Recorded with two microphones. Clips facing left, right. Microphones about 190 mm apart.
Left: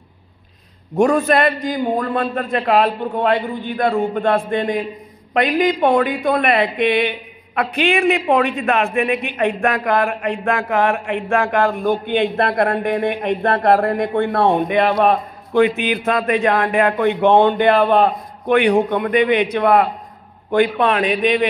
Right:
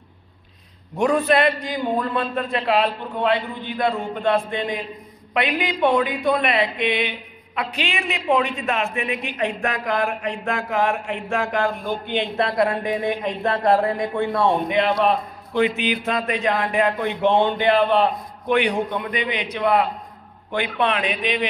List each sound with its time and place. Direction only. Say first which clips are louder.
0.9 s a man's voice: left 4 dB; 45° left (ahead or behind)